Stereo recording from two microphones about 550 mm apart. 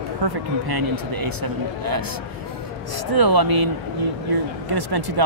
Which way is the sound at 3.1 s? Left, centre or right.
Right.